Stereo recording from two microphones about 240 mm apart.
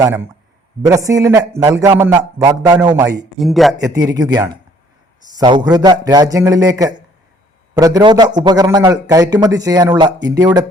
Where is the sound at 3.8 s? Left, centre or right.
Centre.